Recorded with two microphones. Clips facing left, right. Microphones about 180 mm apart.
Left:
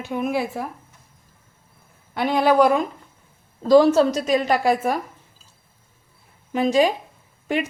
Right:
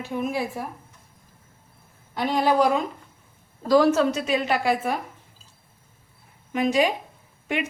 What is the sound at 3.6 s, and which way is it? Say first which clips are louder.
A woman's voice: left 4 dB; 25° left (ahead or behind).